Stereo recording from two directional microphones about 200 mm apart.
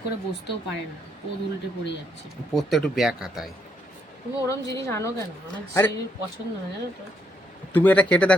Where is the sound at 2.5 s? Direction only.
Centre (ahead or behind).